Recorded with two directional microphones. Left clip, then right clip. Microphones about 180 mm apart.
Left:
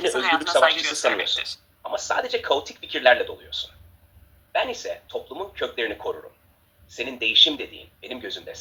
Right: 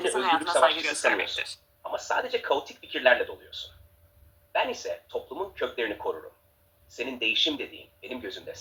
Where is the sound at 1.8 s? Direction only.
20° left (ahead or behind).